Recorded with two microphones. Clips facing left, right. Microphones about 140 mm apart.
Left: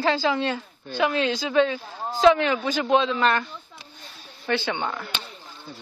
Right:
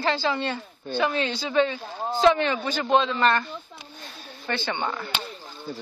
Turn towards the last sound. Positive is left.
turn(degrees=0)  # may be behind; listen again after turning